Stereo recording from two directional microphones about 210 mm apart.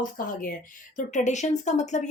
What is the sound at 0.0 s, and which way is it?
Speech, 40° left (ahead or behind).